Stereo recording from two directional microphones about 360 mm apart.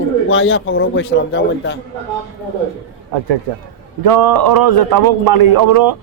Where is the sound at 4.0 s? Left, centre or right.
Right.